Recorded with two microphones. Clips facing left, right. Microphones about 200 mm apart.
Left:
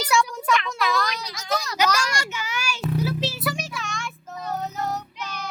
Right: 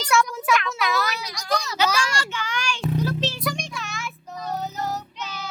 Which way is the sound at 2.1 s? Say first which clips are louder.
Right 1 dB; 10° left (ahead or behind).